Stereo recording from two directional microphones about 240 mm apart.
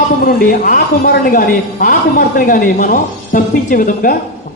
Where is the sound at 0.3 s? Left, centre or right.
Left.